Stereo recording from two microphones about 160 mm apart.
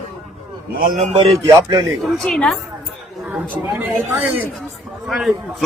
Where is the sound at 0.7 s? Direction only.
60° right (ahead or behind).